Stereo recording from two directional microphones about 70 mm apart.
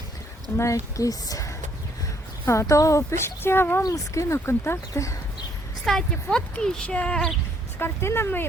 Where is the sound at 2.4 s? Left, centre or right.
Left.